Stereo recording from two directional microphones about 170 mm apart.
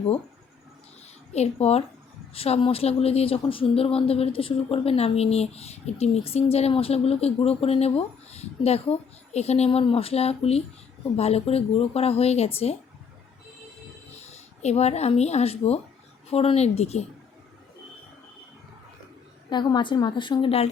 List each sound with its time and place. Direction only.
1.3 s speech: 40° left (ahead or behind)
14.2 s speech: 40° left (ahead or behind)
19.5 s a woman's voice: 25° left (ahead or behind)